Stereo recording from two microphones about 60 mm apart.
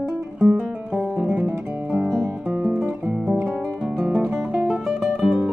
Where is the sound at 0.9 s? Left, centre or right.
Centre.